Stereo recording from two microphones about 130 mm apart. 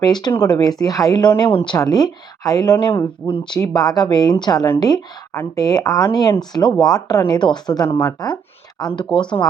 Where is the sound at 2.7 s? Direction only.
40° left (ahead or behind).